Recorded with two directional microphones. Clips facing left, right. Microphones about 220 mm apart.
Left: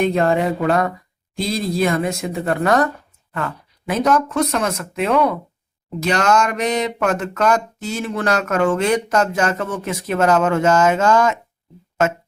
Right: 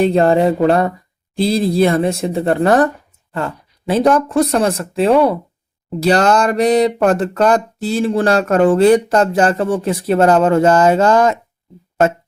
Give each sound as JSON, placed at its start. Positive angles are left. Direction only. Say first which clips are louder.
{"t": 0.0, "sound": "speech", "louder": "right 5 dB", "side_deg": -35}